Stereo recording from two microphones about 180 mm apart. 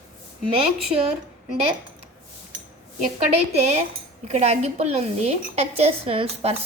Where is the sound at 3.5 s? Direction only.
35° right (ahead or behind).